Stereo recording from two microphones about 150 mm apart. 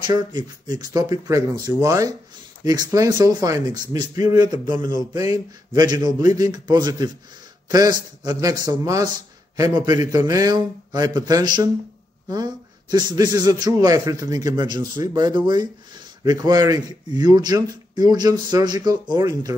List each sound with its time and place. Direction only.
0.0 s a man's voice: 30° right (ahead or behind)